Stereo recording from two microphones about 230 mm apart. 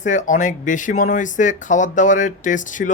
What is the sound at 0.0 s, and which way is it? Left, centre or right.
Speech, left.